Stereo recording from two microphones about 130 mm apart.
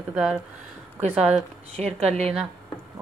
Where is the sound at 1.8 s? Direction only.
55° right (ahead or behind).